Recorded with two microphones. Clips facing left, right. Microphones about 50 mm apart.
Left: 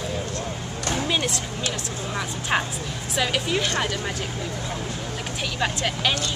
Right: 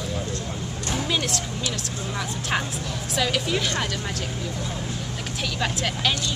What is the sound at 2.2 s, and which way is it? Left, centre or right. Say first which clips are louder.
A woman's voice: left 2 dB; centre.